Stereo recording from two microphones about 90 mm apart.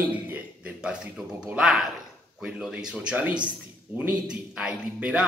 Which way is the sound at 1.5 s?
5° right (ahead or behind).